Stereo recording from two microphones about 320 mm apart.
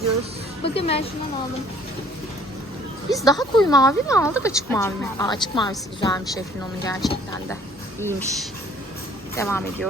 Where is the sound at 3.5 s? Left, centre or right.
Centre.